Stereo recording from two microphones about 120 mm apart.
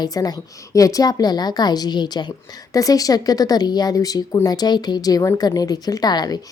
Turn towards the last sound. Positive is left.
turn(degrees=35)  # may be behind; listen again after turning